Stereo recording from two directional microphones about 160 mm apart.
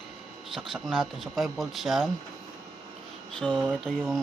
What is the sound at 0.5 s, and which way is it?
Speech, centre (ahead or behind).